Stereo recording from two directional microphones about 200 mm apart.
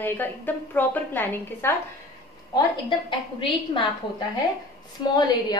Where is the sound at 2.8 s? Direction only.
25° left (ahead or behind).